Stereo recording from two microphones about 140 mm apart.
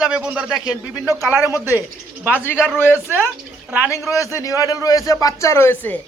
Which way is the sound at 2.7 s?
15° left (ahead or behind).